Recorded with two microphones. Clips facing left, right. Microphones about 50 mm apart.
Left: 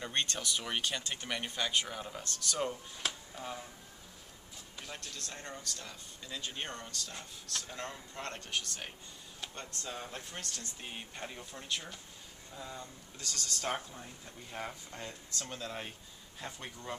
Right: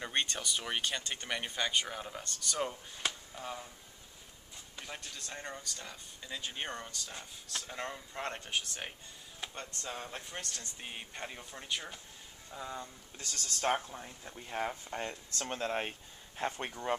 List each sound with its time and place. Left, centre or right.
0.0 s speech: centre
4.7 s speech: centre
13.2 s speech: right